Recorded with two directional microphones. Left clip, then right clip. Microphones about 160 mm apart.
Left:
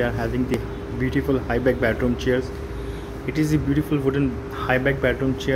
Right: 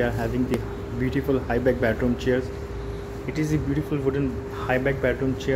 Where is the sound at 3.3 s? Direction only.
20° left (ahead or behind).